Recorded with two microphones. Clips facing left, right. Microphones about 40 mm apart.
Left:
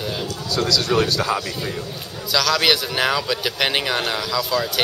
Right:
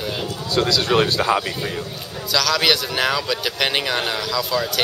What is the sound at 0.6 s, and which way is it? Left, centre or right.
Speech, right.